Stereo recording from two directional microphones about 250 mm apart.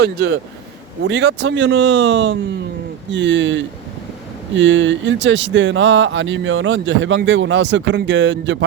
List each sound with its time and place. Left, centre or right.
0.0 s speech: right